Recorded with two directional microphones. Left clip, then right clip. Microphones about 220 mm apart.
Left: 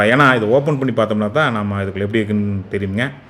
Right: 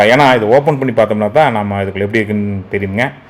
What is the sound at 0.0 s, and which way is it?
Speech, centre (ahead or behind).